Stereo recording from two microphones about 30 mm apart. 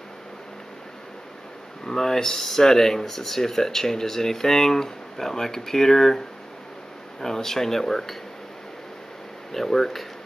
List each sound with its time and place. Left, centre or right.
1.9 s speech: centre
9.5 s speech: centre